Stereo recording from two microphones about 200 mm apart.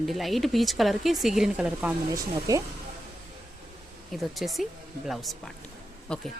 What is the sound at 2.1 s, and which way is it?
Speech, 15° right (ahead or behind).